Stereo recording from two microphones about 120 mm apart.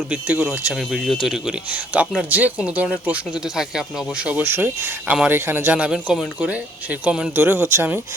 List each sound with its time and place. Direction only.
0.1 s speech: 10° right (ahead or behind)